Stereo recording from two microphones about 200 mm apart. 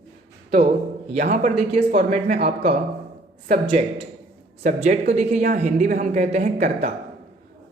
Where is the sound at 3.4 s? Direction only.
35° right (ahead or behind).